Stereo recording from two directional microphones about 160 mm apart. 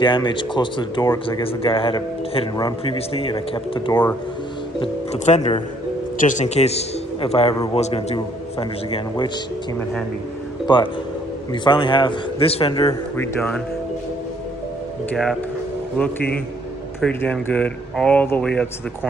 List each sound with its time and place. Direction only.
0.0 s a man's voice: 30° left (ahead or behind)
3.9 s speech: 15° left (ahead or behind)
4.7 s speech: 35° left (ahead or behind)
5.2 s a man's voice: 45° left (ahead or behind)
10.7 s a man's voice: 25° left (ahead or behind)
13.1 s speech: 10° left (ahead or behind)
16.0 s speech: 10° left (ahead or behind)